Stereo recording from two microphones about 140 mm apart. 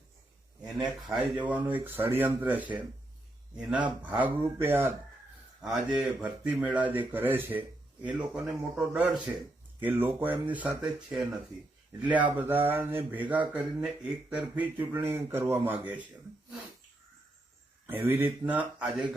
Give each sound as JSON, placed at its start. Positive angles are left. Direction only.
{"t": 1.0, "sound": "speech", "side_deg": -5}
{"t": 5.6, "sound": "speech", "side_deg": 0}
{"t": 17.8, "sound": "speech", "side_deg": -15}